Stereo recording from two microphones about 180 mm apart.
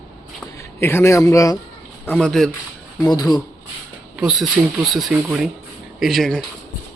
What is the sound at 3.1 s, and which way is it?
Speech, 20° left (ahead or behind).